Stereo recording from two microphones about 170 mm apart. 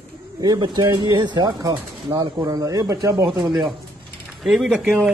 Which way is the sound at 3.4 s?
Centre (ahead or behind).